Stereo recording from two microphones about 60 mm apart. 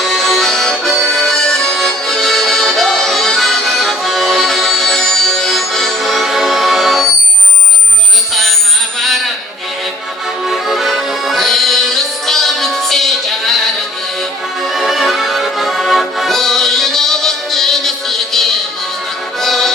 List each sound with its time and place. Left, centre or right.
0.0 s accordion: centre
9.0 s a sound: centre
10.4 s accordion: centre
14.7 s accordion: centre
19.4 s music: centre